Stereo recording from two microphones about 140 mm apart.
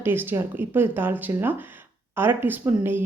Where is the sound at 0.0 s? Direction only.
15° right (ahead or behind).